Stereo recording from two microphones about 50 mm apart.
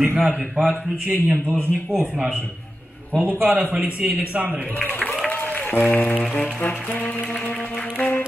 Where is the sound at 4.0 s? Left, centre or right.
Right.